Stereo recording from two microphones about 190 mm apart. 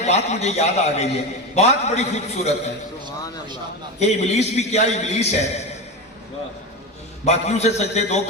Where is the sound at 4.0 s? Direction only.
35° left (ahead or behind).